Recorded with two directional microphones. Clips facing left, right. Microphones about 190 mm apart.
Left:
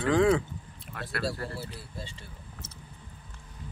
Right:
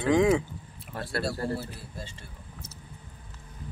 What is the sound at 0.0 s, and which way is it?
Speech, 10° right (ahead or behind).